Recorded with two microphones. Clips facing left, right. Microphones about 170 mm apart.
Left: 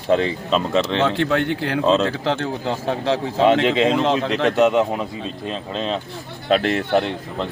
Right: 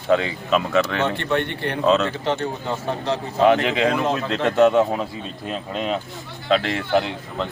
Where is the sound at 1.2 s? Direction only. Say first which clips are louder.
Left 4 dB; 90° left.